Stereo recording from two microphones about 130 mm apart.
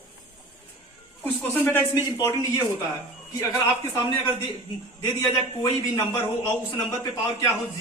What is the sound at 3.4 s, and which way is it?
A man's voice, 25° left (ahead or behind).